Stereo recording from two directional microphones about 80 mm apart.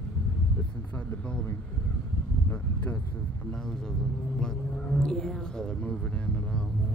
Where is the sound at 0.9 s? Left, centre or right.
Centre.